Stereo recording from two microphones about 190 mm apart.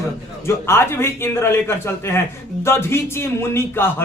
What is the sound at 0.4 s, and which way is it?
A man's voice, 15° left (ahead or behind).